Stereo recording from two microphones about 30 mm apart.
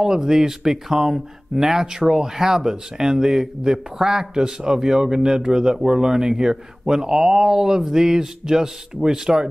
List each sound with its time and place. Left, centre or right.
0.0 s speech: centre